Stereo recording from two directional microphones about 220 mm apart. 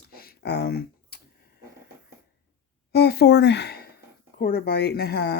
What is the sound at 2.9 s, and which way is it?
Speech, 45° left (ahead or behind).